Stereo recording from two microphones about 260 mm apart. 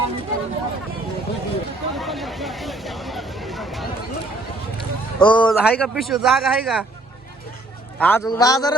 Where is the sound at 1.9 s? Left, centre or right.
Centre.